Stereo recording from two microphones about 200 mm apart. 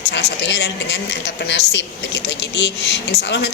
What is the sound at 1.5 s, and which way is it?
A woman's voice, 65° left (ahead or behind).